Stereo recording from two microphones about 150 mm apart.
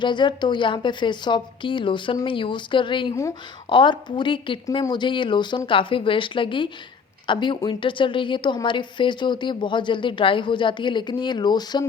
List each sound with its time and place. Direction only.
0.0 s a woman's voice: 30° left (ahead or behind)